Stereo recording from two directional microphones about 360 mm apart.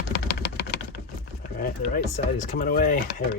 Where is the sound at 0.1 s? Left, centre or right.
Left.